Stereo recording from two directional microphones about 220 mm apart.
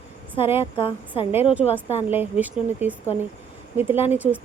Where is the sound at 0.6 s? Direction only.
25° left (ahead or behind).